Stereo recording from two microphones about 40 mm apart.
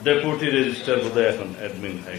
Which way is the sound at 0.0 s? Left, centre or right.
Centre.